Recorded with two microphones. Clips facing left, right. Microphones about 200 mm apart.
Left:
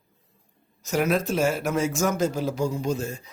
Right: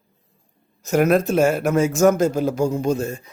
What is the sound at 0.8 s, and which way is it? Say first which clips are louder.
Speech: right 7 dB; 60° right (ahead or behind).